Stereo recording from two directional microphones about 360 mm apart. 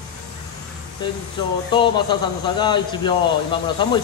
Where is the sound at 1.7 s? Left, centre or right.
Centre.